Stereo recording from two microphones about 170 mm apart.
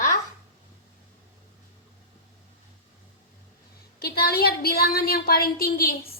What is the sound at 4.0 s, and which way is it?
A woman's voice, 70° left (ahead or behind).